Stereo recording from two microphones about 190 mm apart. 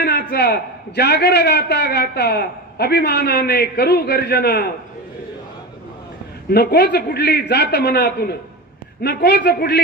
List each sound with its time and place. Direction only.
0.0 s a man's voice: 60° left (ahead or behind)
6.5 s a man's voice: 60° left (ahead or behind)